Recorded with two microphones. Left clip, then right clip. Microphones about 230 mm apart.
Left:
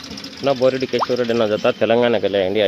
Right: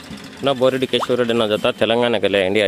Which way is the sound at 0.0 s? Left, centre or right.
Right.